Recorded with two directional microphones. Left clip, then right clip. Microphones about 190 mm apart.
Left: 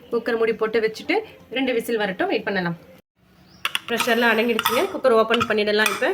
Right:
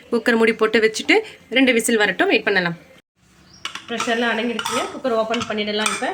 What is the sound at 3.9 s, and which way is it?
Speech, 65° left (ahead or behind).